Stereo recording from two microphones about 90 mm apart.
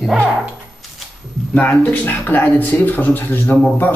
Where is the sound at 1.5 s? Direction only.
15° left (ahead or behind).